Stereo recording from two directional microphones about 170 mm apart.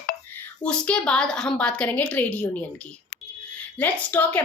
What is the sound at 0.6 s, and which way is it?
A woman's voice, 5° left (ahead or behind).